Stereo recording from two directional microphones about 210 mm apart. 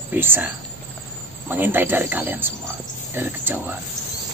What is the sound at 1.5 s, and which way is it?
Speech, 10° right (ahead or behind).